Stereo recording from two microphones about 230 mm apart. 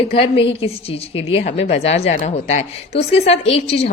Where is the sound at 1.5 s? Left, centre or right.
Left.